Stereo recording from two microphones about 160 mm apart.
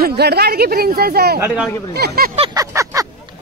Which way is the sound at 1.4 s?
5° right (ahead or behind).